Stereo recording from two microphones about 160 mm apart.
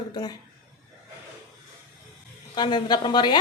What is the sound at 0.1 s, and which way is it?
Speech, 25° left (ahead or behind).